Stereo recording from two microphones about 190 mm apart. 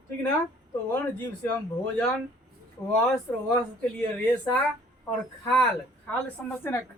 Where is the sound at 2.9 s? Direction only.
5° left (ahead or behind).